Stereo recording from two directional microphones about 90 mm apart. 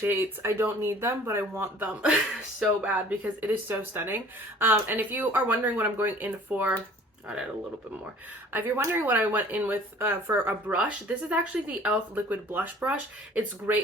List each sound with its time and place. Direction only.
0.0 s speech: 25° right (ahead or behind)
2.0 s speech: 10° right (ahead or behind)
8.5 s speech: 25° right (ahead or behind)
10.7 s speech: 15° right (ahead or behind)